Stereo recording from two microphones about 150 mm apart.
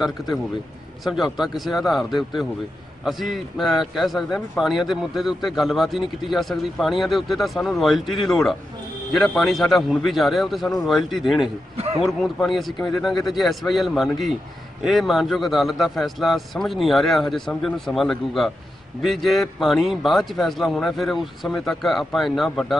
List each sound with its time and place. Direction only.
1.0 s a man's voice: centre (ahead or behind)
11.7 s a sound: 45° right (ahead or behind)
12.0 s a man's voice: centre (ahead or behind)
12.7 s speech: 25° left (ahead or behind)
13.3 s a man's voice: centre (ahead or behind)
19.6 s a man's voice: centre (ahead or behind)